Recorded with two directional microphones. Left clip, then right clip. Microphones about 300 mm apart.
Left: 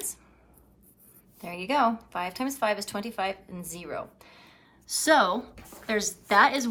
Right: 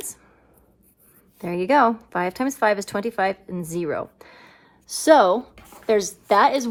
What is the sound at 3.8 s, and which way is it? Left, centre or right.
A woman's voice, right.